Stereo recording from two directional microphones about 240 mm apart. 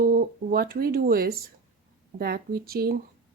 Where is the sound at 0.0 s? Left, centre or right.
Right.